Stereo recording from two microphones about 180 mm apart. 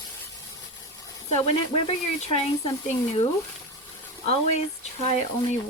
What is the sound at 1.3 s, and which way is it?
Speech, 35° left (ahead or behind).